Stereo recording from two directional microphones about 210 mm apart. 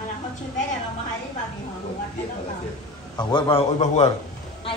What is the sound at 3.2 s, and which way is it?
Speech, 20° left (ahead or behind).